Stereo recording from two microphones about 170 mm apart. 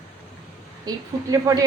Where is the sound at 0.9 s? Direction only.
25° right (ahead or behind).